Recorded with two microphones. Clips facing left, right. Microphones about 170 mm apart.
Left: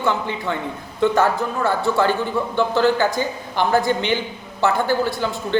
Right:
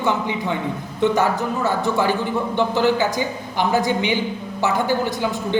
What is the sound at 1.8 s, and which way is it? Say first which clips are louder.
A man's voice: left 1 dB; 15° right (ahead or behind).